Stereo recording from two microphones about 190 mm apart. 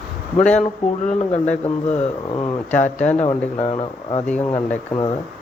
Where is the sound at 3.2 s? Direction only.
30° left (ahead or behind).